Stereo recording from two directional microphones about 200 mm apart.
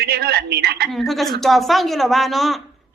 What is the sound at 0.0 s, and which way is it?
Speech, 55° right (ahead or behind).